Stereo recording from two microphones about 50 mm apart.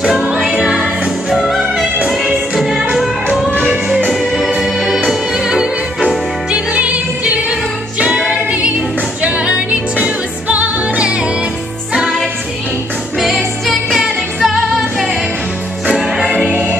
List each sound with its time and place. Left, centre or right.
0.2 s music: centre
1.3 s music: centre
4.1 s music: centre
6.5 s music: right
11.9 s music: centre
13.2 s music: centre